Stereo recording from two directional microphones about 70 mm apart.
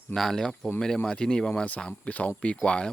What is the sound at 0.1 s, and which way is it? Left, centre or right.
Speech, centre.